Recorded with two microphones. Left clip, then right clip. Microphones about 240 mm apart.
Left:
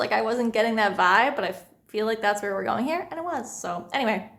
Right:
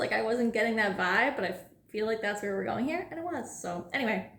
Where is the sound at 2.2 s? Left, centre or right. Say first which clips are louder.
Left 8 dB; left.